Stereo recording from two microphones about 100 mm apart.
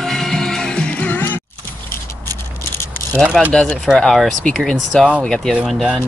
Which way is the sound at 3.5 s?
10° left (ahead or behind).